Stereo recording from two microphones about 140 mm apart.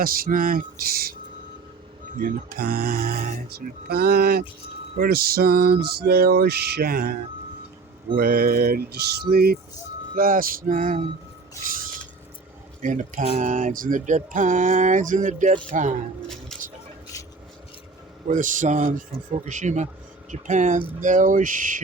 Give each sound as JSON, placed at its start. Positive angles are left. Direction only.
{"t": 0.0, "sound": "speech", "side_deg": -90}
{"t": 2.1, "sound": "speech", "side_deg": -90}
{"t": 10.2, "sound": "a sound", "side_deg": -90}
{"t": 12.8, "sound": "speech", "side_deg": -65}
{"t": 16.5, "sound": "a sound", "side_deg": 5}
{"t": 18.3, "sound": "speech", "side_deg": -65}